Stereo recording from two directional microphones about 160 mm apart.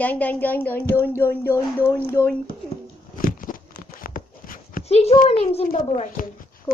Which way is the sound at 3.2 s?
60° left (ahead or behind).